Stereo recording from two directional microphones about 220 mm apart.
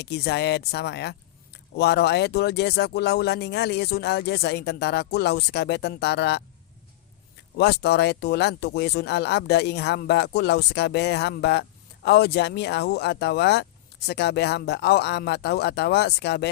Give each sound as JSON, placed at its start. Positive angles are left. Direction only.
{"t": 0.0, "sound": "speech", "side_deg": 50}
{"t": 7.5, "sound": "speech", "side_deg": 50}